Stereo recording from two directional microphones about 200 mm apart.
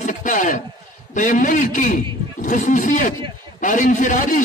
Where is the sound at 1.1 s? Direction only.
40° left (ahead or behind).